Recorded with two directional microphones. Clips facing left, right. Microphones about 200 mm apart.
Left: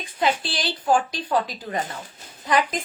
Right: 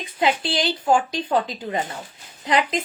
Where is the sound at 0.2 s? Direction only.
25° right (ahead or behind).